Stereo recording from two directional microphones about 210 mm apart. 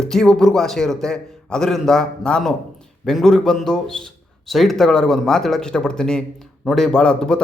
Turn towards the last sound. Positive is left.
turn(degrees=5)  # may be behind; listen again after turning